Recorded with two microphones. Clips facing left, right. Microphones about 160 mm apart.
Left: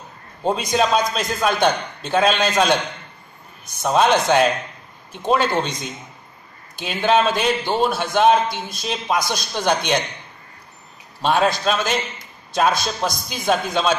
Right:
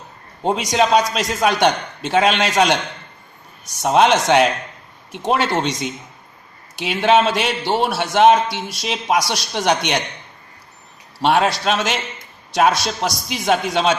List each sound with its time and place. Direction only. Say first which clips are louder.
0.5 s a man's voice: right 2 dB; 75° right (ahead or behind)
11.1 s a man's voice: right 2 dB; 75° right (ahead or behind)